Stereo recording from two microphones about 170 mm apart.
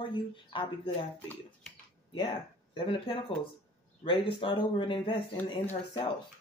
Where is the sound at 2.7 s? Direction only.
30° left (ahead or behind).